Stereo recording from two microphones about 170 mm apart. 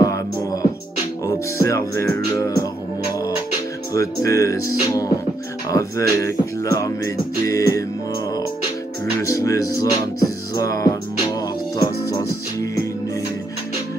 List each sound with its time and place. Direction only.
0.0 s music: 20° left (ahead or behind)
3.9 s music: 20° left (ahead or behind)
9.2 s music: 20° left (ahead or behind)